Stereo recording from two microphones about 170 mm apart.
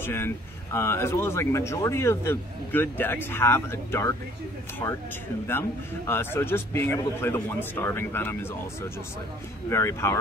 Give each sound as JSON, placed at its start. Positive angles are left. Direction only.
{"t": 0.0, "sound": "a man's voice", "side_deg": 15}